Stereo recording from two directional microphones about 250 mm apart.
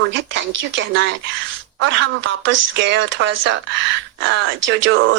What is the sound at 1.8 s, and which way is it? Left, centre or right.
Speech, right.